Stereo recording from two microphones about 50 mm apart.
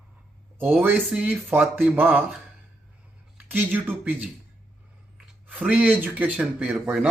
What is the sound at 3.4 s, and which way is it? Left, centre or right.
Speech, right.